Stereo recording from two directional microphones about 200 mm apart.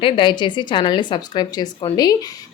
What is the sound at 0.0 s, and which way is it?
A woman's voice, 25° left (ahead or behind).